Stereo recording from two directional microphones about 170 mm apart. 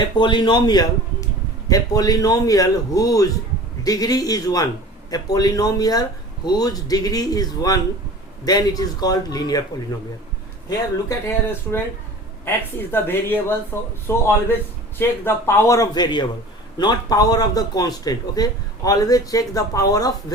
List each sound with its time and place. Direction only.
0.2 s a man's voice: 25° left (ahead or behind)
10.7 s a man's voice: 20° left (ahead or behind)